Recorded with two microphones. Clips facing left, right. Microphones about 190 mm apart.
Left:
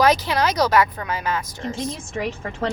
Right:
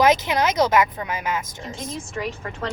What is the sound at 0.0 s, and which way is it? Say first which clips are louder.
Speech: even; 20° right (ahead or behind).